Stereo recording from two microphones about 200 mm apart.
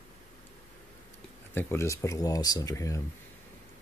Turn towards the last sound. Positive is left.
turn(degrees=15)  # may be behind; listen again after turning